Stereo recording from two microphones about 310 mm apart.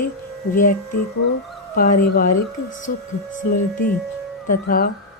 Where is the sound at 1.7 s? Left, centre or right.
Left.